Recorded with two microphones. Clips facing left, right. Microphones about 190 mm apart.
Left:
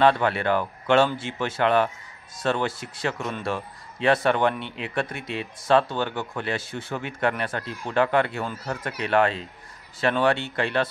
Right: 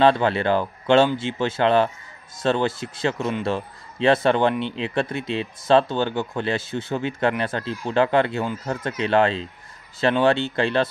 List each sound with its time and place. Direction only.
0.0 s speech: 30° right (ahead or behind)